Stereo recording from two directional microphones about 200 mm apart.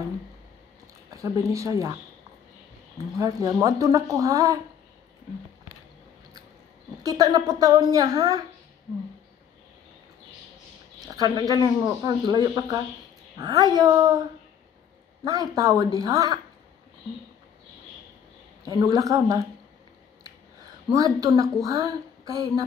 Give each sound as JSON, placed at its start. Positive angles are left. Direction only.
{"t": 1.1, "sound": "a woman's voice", "side_deg": -15}
{"t": 3.2, "sound": "a woman's voice", "side_deg": -15}
{"t": 7.0, "sound": "speech", "side_deg": -20}
{"t": 11.1, "sound": "speech", "side_deg": -20}
{"t": 15.2, "sound": "a woman's voice", "side_deg": -15}
{"t": 18.9, "sound": "a woman's voice", "side_deg": -15}
{"t": 20.9, "sound": "a woman's voice", "side_deg": -15}